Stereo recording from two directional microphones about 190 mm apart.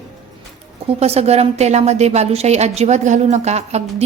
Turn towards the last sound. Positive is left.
turn(degrees=-35)  # may be behind; listen again after turning